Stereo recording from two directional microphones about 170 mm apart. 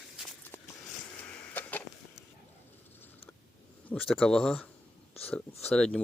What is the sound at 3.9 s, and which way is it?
Speech, 5° left (ahead or behind).